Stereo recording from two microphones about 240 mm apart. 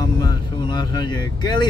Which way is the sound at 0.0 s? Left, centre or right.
Centre.